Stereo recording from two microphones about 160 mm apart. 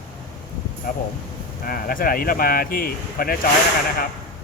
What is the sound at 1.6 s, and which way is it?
Speech, 65° left (ahead or behind).